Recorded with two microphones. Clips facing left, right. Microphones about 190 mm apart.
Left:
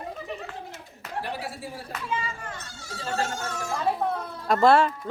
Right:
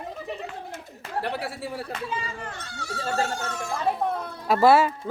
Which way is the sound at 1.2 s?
65° right (ahead or behind).